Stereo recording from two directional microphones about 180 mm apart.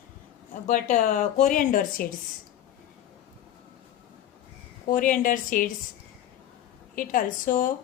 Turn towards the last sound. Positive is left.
turn(degrees=50)  # may be behind; listen again after turning